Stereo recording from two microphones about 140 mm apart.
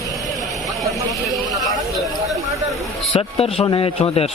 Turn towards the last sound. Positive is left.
turn(degrees=45)  # may be behind; listen again after turning